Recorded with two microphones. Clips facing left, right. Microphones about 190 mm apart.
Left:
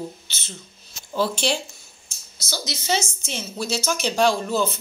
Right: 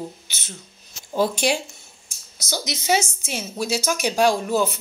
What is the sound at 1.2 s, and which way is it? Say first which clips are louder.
Speech: right 2 dB; 15° right (ahead or behind).